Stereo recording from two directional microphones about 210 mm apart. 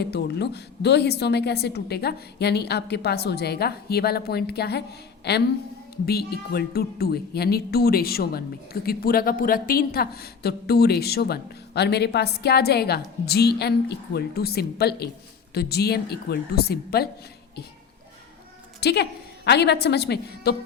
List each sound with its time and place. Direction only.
0.0 s a woman's voice: 50° left (ahead or behind)
18.8 s a woman's voice: 50° left (ahead or behind)